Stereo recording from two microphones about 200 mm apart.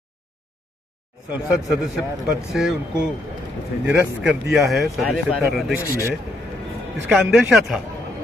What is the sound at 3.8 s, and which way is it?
A man's voice, 5° right (ahead or behind).